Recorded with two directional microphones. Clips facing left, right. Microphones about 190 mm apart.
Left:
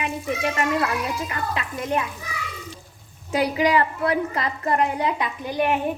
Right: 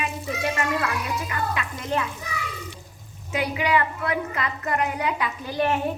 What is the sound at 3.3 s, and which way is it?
A woman's voice, 35° left (ahead or behind).